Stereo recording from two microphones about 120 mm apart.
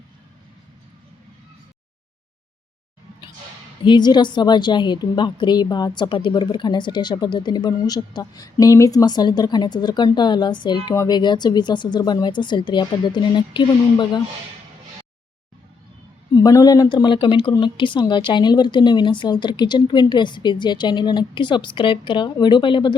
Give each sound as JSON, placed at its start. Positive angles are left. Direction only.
{"t": 3.8, "sound": "a woman's voice", "side_deg": 35}
{"t": 16.3, "sound": "a woman's voice", "side_deg": 35}